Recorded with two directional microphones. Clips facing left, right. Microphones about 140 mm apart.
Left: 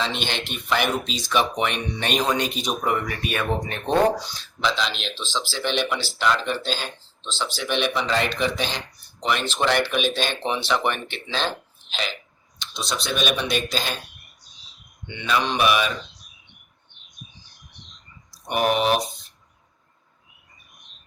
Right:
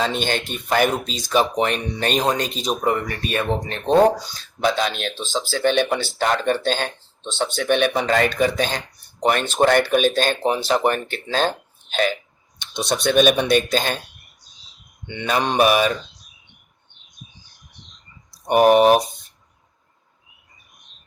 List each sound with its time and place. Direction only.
0.0 s speech: 45° right (ahead or behind); by 3.4 s 30° right (ahead or behind)
4.3 s speech: 50° right (ahead or behind)
15.0 s speech: 55° right (ahead or behind)
18.4 s speech: 45° right (ahead or behind)